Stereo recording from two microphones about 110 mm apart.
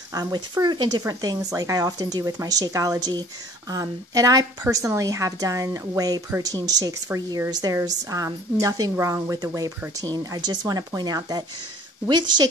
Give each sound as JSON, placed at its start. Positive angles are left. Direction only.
{"t": 0.1, "sound": "a woman's voice", "side_deg": -35}